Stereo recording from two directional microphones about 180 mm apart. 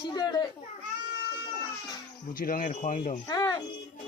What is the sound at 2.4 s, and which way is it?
Speech, 50° left (ahead or behind).